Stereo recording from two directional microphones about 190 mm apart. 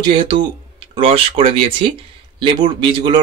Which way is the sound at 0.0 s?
25° right (ahead or behind).